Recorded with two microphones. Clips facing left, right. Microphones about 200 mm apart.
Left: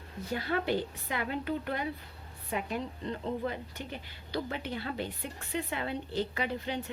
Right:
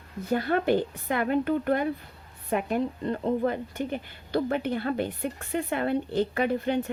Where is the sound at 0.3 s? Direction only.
50° right (ahead or behind).